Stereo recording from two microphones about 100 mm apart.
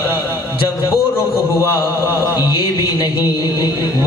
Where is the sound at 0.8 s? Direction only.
35° left (ahead or behind).